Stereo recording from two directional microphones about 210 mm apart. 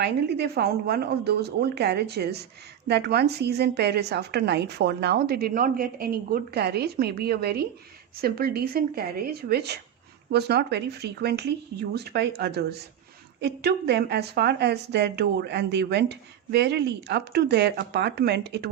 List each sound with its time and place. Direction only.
0.0 s a woman's voice: 50° right (ahead or behind)